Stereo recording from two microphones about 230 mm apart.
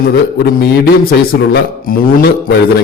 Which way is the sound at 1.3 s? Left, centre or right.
Left.